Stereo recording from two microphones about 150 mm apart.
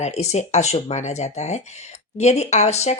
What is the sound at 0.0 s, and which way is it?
Speech, 45° left (ahead or behind).